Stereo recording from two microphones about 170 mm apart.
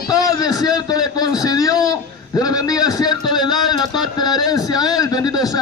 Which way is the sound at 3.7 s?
25° left (ahead or behind).